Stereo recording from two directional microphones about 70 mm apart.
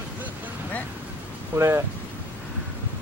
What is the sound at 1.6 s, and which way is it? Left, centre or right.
Speech, right.